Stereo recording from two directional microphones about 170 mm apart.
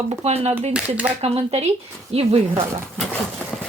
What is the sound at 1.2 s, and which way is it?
Speech, 35° right (ahead or behind).